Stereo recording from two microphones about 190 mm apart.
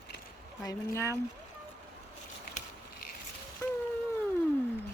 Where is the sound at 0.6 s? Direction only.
15° left (ahead or behind).